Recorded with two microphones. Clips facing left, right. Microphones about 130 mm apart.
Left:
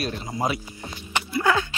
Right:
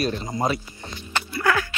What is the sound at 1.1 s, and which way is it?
Music, 15° left (ahead or behind).